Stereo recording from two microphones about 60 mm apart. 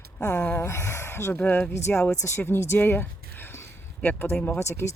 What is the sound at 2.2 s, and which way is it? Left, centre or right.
Speech, left.